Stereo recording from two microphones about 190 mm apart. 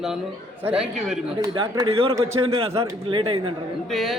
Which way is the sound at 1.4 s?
20° right (ahead or behind).